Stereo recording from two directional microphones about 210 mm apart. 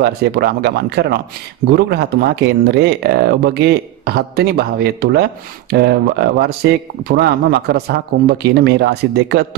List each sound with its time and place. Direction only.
0.0 s speech: 50° right (ahead or behind)